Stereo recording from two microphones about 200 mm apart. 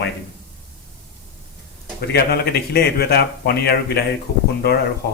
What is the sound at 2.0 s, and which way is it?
Speech, 55° left (ahead or behind).